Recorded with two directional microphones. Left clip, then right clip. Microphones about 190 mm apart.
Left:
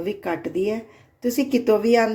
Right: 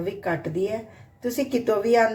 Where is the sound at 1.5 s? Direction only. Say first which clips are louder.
Left 2 dB; 40° left (ahead or behind).